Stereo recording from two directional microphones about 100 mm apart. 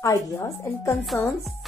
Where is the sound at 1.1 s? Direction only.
5° left (ahead or behind).